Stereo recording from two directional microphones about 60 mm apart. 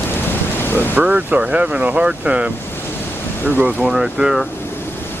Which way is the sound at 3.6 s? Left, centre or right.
Right.